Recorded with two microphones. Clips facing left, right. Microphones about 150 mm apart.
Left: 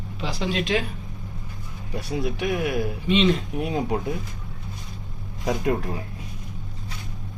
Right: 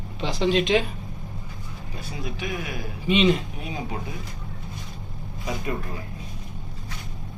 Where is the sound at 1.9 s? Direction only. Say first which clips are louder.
Left 8 dB; 75° left (ahead or behind).